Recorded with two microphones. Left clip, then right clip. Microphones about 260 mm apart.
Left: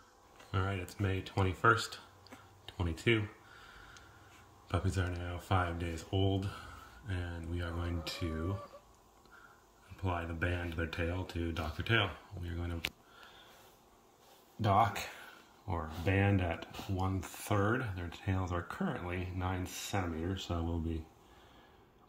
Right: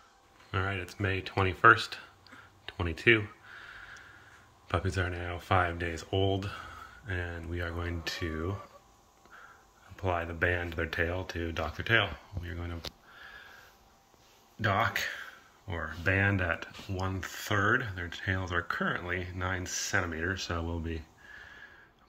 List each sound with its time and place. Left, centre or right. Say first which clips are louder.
0.5 s a sound: right 5 dB; centre
0.9 s speech: right 7 dB; centre
4.6 s speech: right 6 dB; centre
10.0 s speech: right 7 dB; centre
14.6 s speech: right 1 dB; centre
20.4 s speech: right 3 dB; right